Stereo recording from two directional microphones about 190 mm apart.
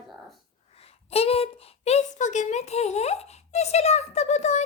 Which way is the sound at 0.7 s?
30° left (ahead or behind).